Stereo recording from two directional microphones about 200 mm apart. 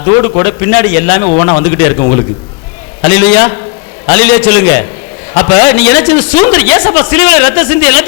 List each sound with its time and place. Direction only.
0.0 s a man's voice: 15° left (ahead or behind)